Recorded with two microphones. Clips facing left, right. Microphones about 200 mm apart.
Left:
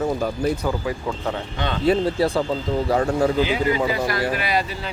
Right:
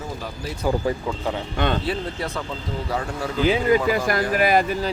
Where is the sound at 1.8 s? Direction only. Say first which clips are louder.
Left 8 dB; 35° left (ahead or behind).